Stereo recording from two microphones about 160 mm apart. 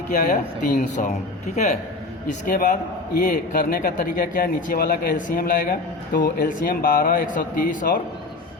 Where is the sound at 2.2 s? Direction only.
55° left (ahead or behind).